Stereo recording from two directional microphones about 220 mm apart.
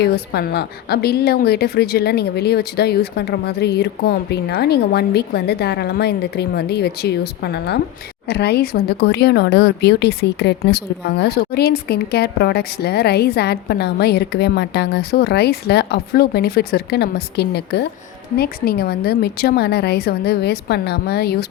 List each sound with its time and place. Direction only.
0.0 s speech: 50° left (ahead or behind)